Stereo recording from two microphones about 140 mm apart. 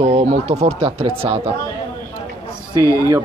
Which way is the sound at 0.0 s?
50° right (ahead or behind).